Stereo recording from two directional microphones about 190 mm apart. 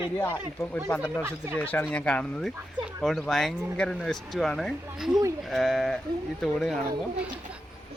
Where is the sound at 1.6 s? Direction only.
10° left (ahead or behind).